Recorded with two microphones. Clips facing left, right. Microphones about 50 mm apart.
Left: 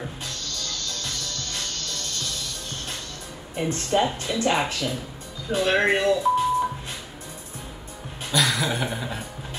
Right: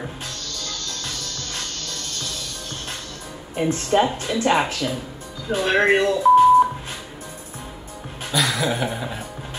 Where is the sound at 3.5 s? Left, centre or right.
Centre.